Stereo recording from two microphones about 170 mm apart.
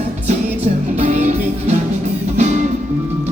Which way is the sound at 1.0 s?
40° right (ahead or behind).